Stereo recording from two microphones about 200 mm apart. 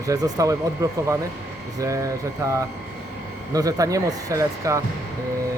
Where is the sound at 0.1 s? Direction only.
15° right (ahead or behind).